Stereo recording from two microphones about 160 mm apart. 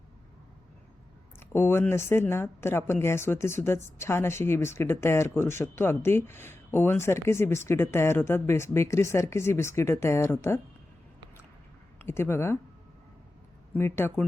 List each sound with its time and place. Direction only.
1.4 s speech: 15° left (ahead or behind)
11.9 s speech: 15° left (ahead or behind)
13.7 s speech: 15° left (ahead or behind)